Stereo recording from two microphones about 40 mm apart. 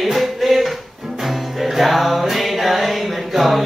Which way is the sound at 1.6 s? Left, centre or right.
Centre.